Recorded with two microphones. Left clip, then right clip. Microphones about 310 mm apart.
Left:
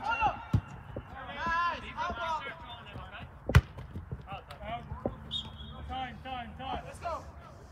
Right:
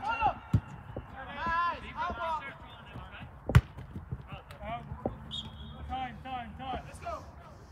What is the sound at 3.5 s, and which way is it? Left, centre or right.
Basketball bounce, centre.